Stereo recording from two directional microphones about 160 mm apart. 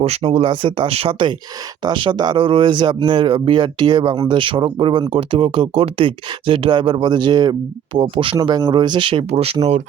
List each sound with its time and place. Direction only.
0.0 s speech: 40° right (ahead or behind)